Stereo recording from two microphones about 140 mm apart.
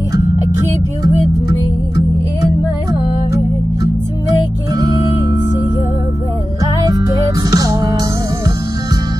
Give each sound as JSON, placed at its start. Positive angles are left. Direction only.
{"t": 4.7, "sound": "music", "side_deg": -25}
{"t": 6.6, "sound": "music", "side_deg": -25}